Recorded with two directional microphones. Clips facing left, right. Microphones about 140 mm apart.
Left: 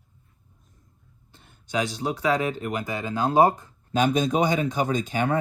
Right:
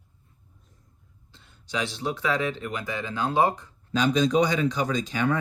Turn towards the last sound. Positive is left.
turn(degrees=50)  # may be behind; listen again after turning